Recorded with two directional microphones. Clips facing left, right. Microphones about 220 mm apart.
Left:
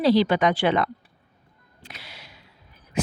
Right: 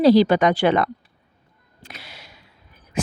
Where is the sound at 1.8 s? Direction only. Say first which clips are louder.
Right 2 dB; 45° right (ahead or behind).